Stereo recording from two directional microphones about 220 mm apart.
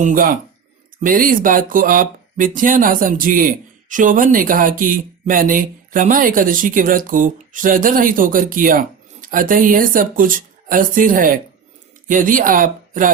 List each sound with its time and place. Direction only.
0.0 s speech: 40° right (ahead or behind)